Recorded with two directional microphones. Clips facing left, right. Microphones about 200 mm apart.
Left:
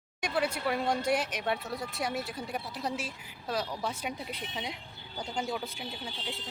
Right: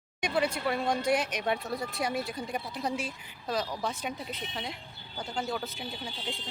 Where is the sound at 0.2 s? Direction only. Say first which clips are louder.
Right 2 dB; 5° left (ahead or behind).